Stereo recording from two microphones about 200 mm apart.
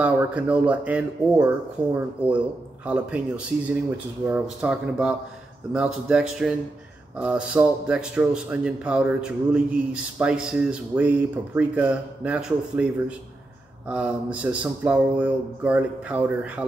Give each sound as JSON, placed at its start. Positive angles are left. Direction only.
{"t": 0.0, "sound": "speech", "side_deg": -5}